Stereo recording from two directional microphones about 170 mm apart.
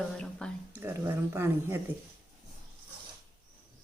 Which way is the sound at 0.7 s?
15° right (ahead or behind).